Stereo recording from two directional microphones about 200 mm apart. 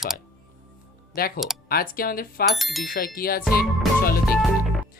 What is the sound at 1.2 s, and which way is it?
Speech, 50° left (ahead or behind).